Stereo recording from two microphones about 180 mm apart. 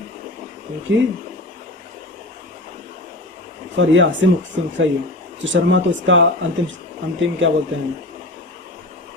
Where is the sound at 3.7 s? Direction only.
90° right.